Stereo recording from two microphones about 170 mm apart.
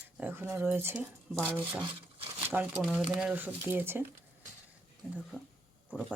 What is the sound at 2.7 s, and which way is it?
Speech, 5° right (ahead or behind).